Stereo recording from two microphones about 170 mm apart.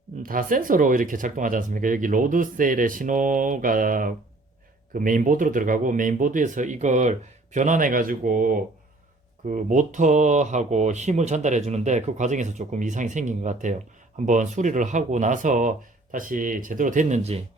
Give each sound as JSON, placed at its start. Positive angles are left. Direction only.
{"t": 0.2, "sound": "speech", "side_deg": -55}